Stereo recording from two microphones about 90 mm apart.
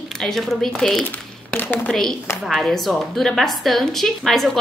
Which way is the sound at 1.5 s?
25° left (ahead or behind).